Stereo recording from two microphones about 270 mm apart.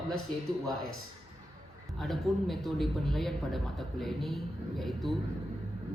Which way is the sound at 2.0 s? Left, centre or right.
Centre.